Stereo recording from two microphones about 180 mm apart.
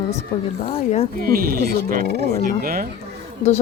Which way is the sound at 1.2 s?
55° right (ahead or behind).